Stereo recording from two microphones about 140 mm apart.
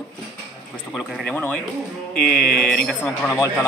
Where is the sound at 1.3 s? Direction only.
10° left (ahead or behind).